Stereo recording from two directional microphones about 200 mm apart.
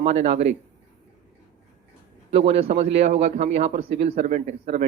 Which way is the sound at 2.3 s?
30° right (ahead or behind).